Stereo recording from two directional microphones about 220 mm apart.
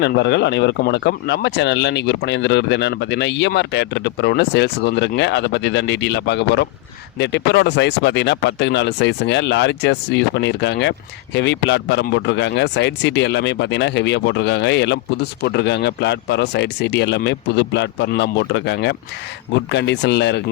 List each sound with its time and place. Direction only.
0.0 s speech: 50° left (ahead or behind)